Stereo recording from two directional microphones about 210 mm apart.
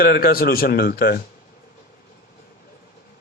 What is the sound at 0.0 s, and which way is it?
A man's voice, 45° left (ahead or behind).